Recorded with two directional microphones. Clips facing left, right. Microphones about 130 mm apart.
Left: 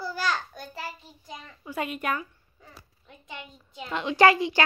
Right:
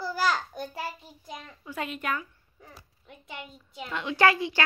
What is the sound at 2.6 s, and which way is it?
A child's voice, 10° right (ahead or behind).